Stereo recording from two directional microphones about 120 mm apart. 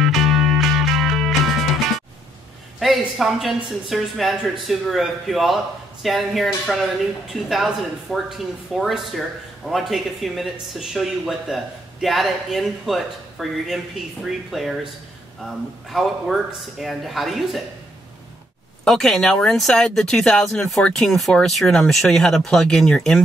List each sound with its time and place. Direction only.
0.0 s music: centre (ahead or behind)
2.8 s speech: centre (ahead or behind)
18.9 s speech: centre (ahead or behind)